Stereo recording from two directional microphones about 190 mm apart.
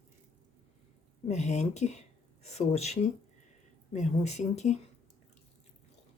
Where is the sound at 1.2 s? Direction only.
35° left (ahead or behind).